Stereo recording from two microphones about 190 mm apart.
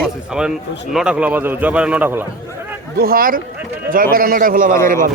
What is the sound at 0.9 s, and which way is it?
A man's voice, 5° right (ahead or behind).